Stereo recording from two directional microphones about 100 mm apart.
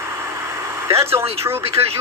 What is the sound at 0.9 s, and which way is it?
Speech, 25° right (ahead or behind).